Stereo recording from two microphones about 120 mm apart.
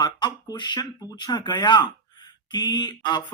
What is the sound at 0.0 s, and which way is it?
Speech, 40° left (ahead or behind).